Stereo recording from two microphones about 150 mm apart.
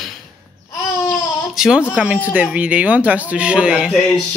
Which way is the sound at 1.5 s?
5° right (ahead or behind).